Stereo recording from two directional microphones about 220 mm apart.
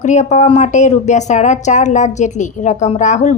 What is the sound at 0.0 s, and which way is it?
A woman's voice, 35° left (ahead or behind).